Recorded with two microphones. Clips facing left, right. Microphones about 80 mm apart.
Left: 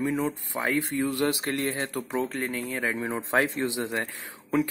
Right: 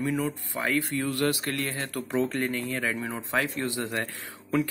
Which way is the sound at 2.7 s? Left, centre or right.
Centre.